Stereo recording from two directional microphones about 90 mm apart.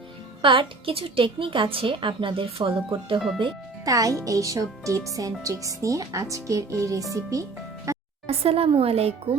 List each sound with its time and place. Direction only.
0.4 s a woman's voice: 75° right (ahead or behind)
3.8 s speech: 40° right (ahead or behind)
7.9 s music: 35° right (ahead or behind)
8.3 s speech: 90° right